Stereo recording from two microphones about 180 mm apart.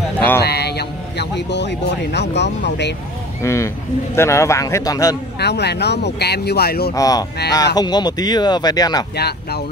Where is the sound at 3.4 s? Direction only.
15° left (ahead or behind).